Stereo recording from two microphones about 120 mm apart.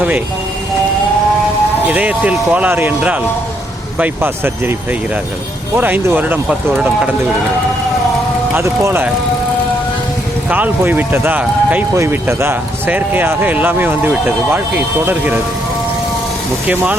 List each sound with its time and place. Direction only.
1.9 s speech: 10° right (ahead or behind)
8.5 s speech: 20° right (ahead or behind)
10.5 s speech: 15° right (ahead or behind)
16.6 s speech: 10° right (ahead or behind)